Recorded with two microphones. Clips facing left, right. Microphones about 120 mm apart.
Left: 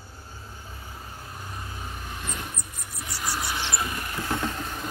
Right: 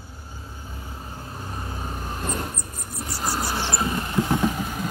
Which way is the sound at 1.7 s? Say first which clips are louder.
Right 5 dB; 40° right (ahead or behind).